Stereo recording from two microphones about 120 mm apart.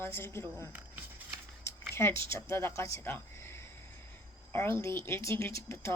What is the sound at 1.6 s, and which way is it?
Speech, 20° left (ahead or behind).